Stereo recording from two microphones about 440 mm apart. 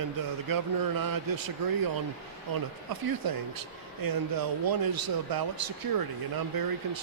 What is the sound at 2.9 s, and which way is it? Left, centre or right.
Speech, right.